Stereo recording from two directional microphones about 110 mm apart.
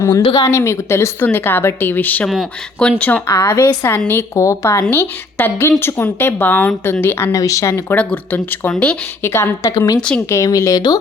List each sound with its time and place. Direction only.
0.3 s a woman's voice: 25° left (ahead or behind)
2.2 s speech: 5° right (ahead or behind)
3.0 s speech: 15° left (ahead or behind)
3.2 s a woman's voice: 30° left (ahead or behind)
7.9 s speech: 15° left (ahead or behind)
9.2 s a woman's voice: 20° left (ahead or behind)